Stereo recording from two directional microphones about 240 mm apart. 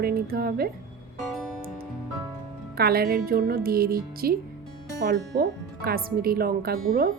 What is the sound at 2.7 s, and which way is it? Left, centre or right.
Speech, right.